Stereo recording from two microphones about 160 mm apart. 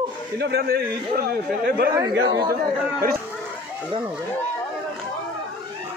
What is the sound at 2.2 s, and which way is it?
Speech, 30° right (ahead or behind).